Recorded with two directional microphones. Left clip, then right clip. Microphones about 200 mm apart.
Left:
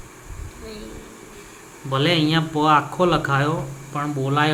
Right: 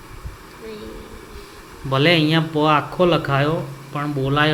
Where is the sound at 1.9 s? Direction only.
15° right (ahead or behind).